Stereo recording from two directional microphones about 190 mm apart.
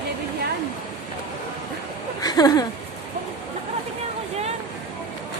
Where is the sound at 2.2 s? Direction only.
20° left (ahead or behind).